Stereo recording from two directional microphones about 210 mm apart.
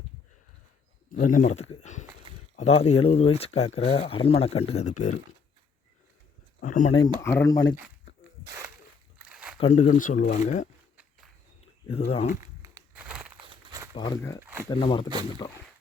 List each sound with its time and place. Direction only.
1.1 s speech: 40° left (ahead or behind)
6.6 s speech: 40° left (ahead or behind)
7.2 s speech: 10° left (ahead or behind)
9.1 s a sound: 5° right (ahead or behind)
9.6 s speech: 30° left (ahead or behind)
11.9 s speech: 25° left (ahead or behind)
12.6 s a sound: 10° right (ahead or behind)
13.7 s a sound: 15° right (ahead or behind)
14.2 s speech: 15° left (ahead or behind)
14.4 s speech: 10° right (ahead or behind)
14.7 s speech: 25° left (ahead or behind)